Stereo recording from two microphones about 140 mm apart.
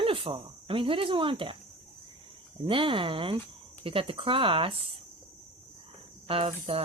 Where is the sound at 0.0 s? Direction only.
40° right (ahead or behind).